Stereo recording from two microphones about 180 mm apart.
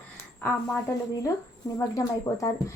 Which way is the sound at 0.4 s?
15° left (ahead or behind).